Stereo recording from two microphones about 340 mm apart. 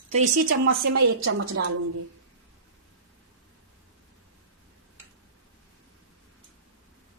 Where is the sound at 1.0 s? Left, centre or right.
Right.